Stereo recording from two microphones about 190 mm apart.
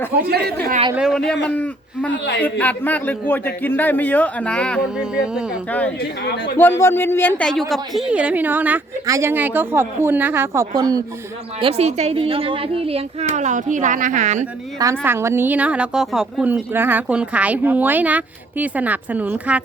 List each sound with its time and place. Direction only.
0.3 s a woman's voice: 55° right (ahead or behind)
0.9 s a man's voice: centre (ahead or behind)
2.0 s speech: 65° left (ahead or behind)
2.4 s a man's voice: 10° left (ahead or behind)
6.0 s speech: 60° left (ahead or behind)
6.6 s a man's voice: 10° left (ahead or behind); by 11.0 s 20° right (ahead or behind)
11.6 s speech: 35° right (ahead or behind)
14.8 s a woman's voice: 15° right (ahead or behind)